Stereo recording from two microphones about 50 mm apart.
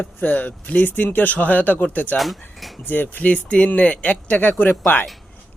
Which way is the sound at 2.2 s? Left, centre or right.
Centre.